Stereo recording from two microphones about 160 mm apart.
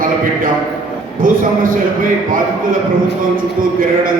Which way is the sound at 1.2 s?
60° right (ahead or behind).